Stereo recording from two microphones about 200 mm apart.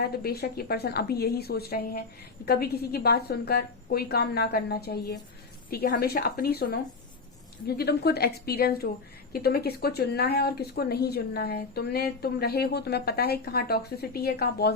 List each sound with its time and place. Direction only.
0.0 s speech: 50° left (ahead or behind)
7.8 s speech: 55° left (ahead or behind)